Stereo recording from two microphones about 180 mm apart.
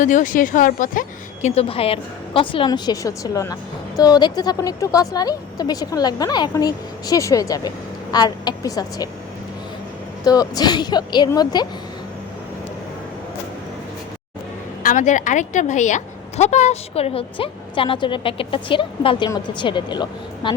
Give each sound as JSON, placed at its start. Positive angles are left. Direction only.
{"t": 0.0, "sound": "speech", "side_deg": 45}
{"t": 10.2, "sound": "speech", "side_deg": 20}
{"t": 14.8, "sound": "a woman's voice", "side_deg": 45}